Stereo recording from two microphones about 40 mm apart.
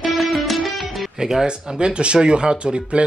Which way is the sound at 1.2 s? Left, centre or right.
Centre.